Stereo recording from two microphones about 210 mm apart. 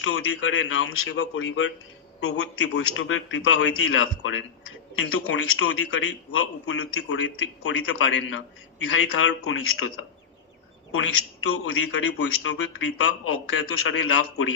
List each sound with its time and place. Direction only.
0.0 s a man's voice: 65° left (ahead or behind)